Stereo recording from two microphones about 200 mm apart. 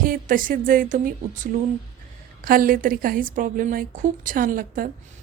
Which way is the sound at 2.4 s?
45° right (ahead or behind).